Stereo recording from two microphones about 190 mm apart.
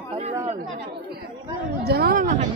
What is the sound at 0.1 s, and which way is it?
Chatter, 30° right (ahead or behind).